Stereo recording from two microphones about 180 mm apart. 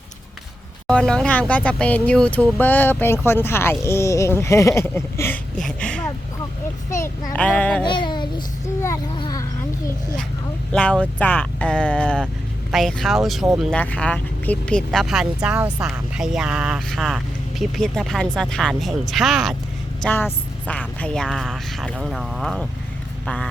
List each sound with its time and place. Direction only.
0.9 s speech: 5° left (ahead or behind)
7.9 s a sound: 25° left (ahead or behind)
10.7 s speech: 5° left (ahead or behind)